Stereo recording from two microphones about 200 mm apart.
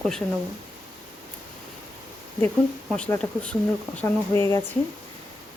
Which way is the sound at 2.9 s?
5° left (ahead or behind).